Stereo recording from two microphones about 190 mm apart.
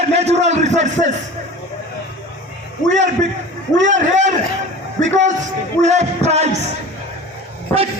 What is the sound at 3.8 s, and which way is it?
Speech, 40° right (ahead or behind).